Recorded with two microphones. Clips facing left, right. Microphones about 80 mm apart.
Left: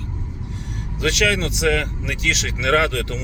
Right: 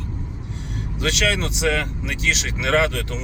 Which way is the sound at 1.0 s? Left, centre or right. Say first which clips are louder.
Left 2 dB; right.